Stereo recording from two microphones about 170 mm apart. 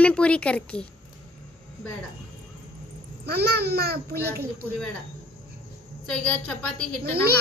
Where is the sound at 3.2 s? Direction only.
70° right (ahead or behind).